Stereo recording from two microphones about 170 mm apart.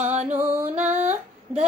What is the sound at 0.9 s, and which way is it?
Female singing, 40° right (ahead or behind).